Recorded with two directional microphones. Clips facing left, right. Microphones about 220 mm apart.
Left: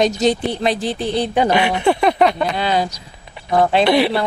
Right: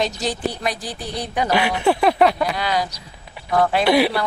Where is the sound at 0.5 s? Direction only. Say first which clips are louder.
Left 7 dB; 25° left (ahead or behind).